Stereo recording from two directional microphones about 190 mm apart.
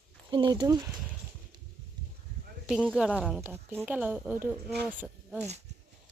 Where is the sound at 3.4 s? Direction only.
10° right (ahead or behind).